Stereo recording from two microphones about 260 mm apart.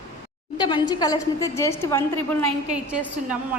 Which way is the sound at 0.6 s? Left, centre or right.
Centre.